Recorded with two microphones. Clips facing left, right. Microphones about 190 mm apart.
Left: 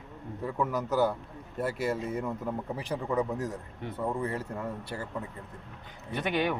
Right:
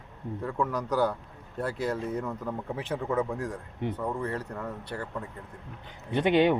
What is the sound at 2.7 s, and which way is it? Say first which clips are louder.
A man's voice: right 2 dB; centre (ahead or behind).